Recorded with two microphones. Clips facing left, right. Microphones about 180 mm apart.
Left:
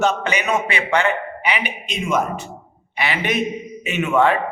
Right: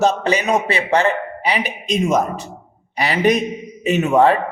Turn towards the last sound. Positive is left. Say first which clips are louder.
# right 4 dB
turn(degrees=-40)  # may be behind; listen again after turning